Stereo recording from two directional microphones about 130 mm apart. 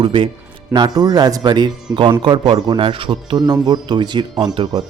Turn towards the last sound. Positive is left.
turn(degrees=-35)  # may be behind; listen again after turning